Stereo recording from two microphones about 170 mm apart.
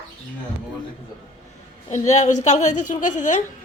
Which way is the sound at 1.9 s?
45° left (ahead or behind).